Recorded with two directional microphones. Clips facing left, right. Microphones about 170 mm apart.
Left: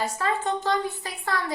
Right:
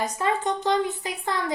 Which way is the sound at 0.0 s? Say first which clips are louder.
Right 1 dB; 20° right (ahead or behind).